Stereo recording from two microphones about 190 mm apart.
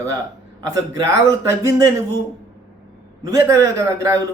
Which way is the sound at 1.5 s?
15° right (ahead or behind).